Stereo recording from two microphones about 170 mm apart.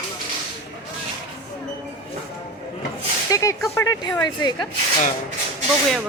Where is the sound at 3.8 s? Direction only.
15° left (ahead or behind).